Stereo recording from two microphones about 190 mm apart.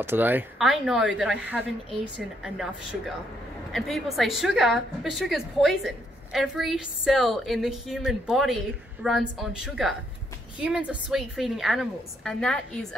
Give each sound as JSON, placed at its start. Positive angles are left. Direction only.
{"t": 0.0, "sound": "a woman's voice", "side_deg": -10}
{"t": 3.7, "sound": "a woman's voice", "side_deg": 0}